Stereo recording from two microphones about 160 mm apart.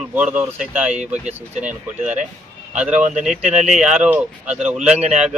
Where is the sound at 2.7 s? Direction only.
5° right (ahead or behind).